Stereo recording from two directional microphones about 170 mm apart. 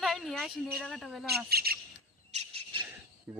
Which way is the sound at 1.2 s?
65° right (ahead or behind).